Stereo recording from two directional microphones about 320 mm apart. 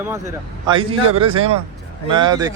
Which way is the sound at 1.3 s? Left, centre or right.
Centre.